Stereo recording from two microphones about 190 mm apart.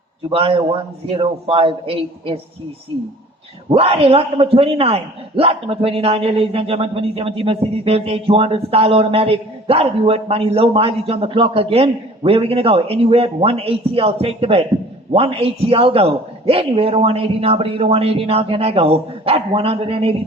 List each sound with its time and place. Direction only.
0.3 s a man's voice: 30° right (ahead or behind)
3.7 s a man's voice: 30° right (ahead or behind)